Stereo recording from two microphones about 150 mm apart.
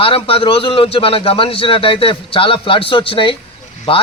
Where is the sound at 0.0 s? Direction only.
40° left (ahead or behind).